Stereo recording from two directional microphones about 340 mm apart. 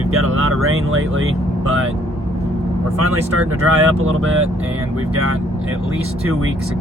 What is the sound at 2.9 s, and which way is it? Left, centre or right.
Speech, right.